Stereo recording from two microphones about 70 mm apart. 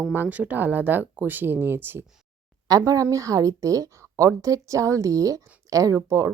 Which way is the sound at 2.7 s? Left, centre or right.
Right.